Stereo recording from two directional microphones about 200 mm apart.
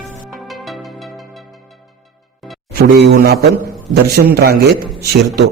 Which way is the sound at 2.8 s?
50° right (ahead or behind).